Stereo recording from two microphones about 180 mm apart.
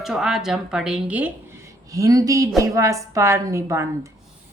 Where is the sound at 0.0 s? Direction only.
Centre (ahead or behind).